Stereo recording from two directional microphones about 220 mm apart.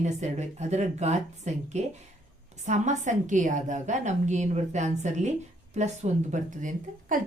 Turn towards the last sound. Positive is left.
turn(degrees=-35)  # may be behind; listen again after turning